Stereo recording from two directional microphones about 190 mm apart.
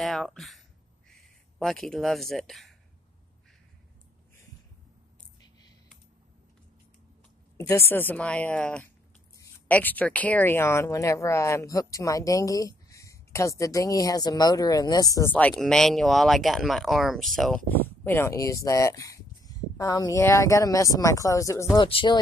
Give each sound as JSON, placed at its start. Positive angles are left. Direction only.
{"t": 0.0, "sound": "speech", "side_deg": 0}
{"t": 7.5, "sound": "speech", "side_deg": 15}